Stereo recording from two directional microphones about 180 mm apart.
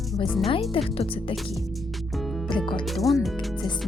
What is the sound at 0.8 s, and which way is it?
Music, 30° left (ahead or behind).